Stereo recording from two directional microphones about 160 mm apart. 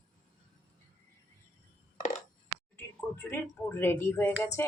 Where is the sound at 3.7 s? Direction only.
15° left (ahead or behind).